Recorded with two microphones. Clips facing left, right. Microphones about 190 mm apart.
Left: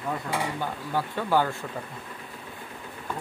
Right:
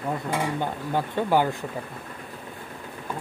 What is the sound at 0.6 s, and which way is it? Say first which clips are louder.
Speech: right 3 dB; 20° right (ahead or behind).